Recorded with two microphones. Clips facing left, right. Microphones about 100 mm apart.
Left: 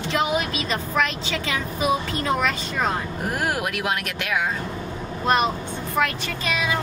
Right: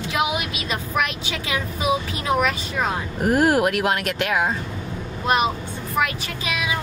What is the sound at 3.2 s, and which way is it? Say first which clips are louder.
Speech: right 9 dB; 40° right (ahead or behind).